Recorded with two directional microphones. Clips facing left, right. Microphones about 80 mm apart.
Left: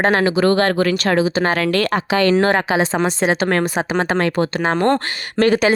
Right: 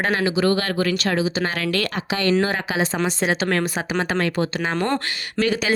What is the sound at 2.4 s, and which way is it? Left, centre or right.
Speech, left.